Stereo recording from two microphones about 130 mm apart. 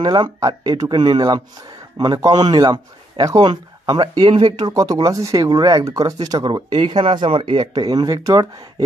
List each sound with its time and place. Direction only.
0.0 s speech: 35° right (ahead or behind)